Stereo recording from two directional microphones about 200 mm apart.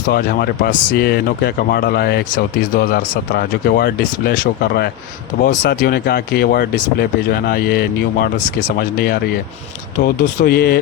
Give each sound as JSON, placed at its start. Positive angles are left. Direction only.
{"t": 0.1, "sound": "speech", "side_deg": 50}
{"t": 10.4, "sound": "speech", "side_deg": 50}